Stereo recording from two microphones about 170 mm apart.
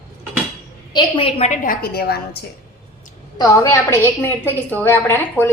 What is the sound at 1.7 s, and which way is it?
Speech, 65° left (ahead or behind).